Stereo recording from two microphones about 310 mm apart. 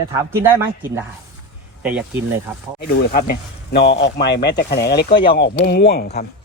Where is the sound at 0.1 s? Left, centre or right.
Centre.